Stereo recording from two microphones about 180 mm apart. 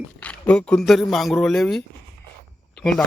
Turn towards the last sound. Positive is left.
turn(degrees=0)  # may be behind; listen again after turning